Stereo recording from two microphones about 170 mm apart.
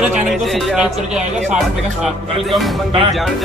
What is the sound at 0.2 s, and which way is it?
Speech, centre (ahead or behind).